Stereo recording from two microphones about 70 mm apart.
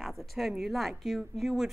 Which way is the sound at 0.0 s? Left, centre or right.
Centre.